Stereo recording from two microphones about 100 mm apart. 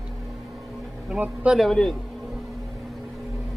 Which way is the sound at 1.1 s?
10° right (ahead or behind).